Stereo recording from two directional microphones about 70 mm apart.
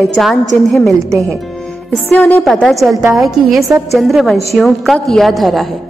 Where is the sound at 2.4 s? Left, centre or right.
Centre.